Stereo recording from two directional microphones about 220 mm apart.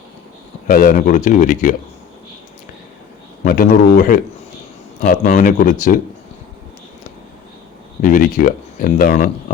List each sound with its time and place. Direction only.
0.7 s speech: 40° left (ahead or behind)
3.4 s speech: 40° left (ahead or behind)
8.0 s speech: 35° left (ahead or behind)